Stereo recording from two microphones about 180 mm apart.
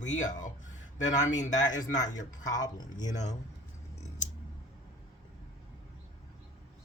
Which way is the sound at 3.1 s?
40° left (ahead or behind).